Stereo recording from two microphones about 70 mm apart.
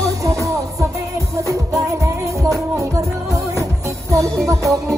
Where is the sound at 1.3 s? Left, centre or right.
Right.